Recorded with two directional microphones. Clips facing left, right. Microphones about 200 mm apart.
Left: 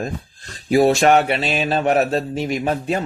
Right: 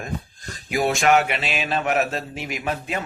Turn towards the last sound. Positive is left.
turn(degrees=35)  # may be behind; listen again after turning